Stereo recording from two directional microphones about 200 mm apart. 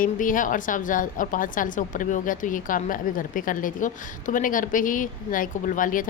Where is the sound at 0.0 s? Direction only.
40° left (ahead or behind).